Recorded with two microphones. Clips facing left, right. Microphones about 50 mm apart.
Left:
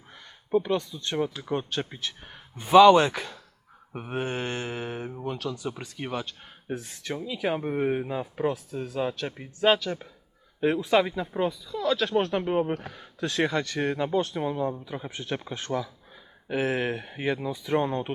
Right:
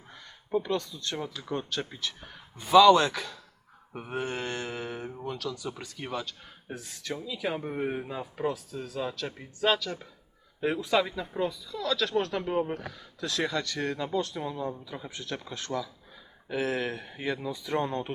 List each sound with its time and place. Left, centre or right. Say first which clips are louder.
0.1 s speech: left 4 dB; left
8.4 s speech: left 2 dB; left